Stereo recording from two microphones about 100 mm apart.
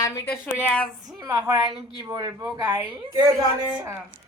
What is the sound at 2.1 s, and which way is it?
Speech, 40° right (ahead or behind).